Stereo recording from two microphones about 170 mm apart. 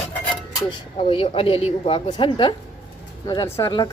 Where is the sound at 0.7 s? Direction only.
30° left (ahead or behind).